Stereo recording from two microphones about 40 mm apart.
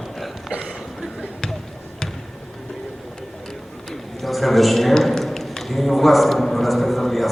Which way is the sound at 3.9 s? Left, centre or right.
Centre.